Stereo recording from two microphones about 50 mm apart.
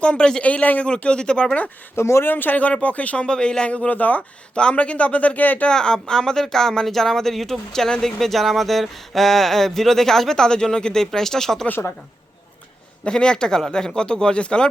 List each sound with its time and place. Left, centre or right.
0.0 s a man's voice: left
2.0 s speech: left
2.2 s speech: left
3.2 s a man's voice: centre; by 5.6 s left
5.6 s speech: centre
13.1 s speech: centre